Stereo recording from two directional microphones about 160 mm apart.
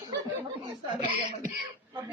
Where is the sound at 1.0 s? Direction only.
30° right (ahead or behind).